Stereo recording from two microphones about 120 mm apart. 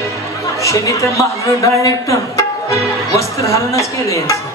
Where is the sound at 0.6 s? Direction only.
25° left (ahead or behind).